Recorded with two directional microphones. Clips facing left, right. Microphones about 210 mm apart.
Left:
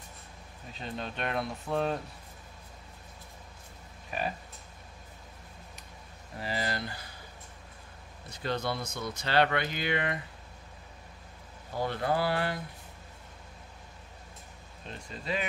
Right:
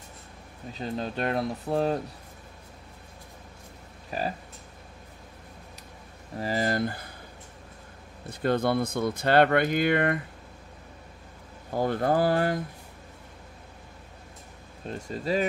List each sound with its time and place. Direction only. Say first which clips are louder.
0.7 s speech: right 6 dB; 35° right (ahead or behind)
4.1 s speech: right 3 dB; 35° right (ahead or behind)
6.4 s speech: right 7 dB; 45° right (ahead or behind)
8.3 s speech: right 8 dB; 55° right (ahead or behind)
11.7 s speech: right 6 dB; 45° right (ahead or behind)
14.9 s speech: right 7 dB; 45° right (ahead or behind)